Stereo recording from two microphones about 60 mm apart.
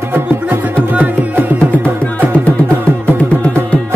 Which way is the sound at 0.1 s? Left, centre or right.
Right.